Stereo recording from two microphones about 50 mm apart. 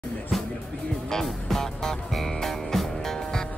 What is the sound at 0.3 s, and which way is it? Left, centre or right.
Music, centre.